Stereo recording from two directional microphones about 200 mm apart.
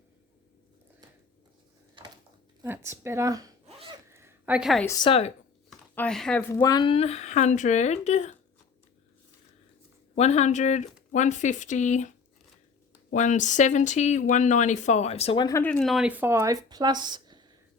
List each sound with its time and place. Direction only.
2.6 s speech: 10° right (ahead or behind)
4.1 s a sound: 10° right (ahead or behind)
4.9 s a woman's voice: 25° left (ahead or behind)
5.9 s speech: 5° left (ahead or behind)
6.5 s speech: 20° left (ahead or behind); by 8.4 s 35° left (ahead or behind)
10.2 s speech: 35° left (ahead or behind)
15.4 s speech: 10° left (ahead or behind); by 17.4 s 20° right (ahead or behind)